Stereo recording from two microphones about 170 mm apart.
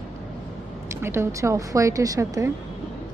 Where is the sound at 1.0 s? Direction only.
15° right (ahead or behind).